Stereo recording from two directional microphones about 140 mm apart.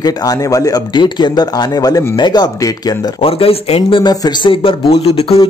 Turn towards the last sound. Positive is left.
turn(degrees=45)  # may be behind; listen again after turning